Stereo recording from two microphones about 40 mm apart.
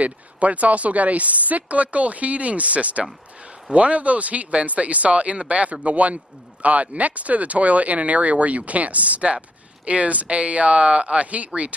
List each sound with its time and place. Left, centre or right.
0.0 s speech: right